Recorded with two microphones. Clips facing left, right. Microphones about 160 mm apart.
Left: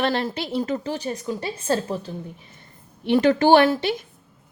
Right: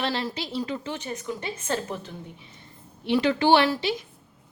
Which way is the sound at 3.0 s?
50° left (ahead or behind).